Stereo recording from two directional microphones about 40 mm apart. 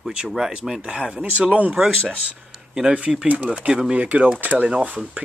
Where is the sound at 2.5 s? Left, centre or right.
Centre.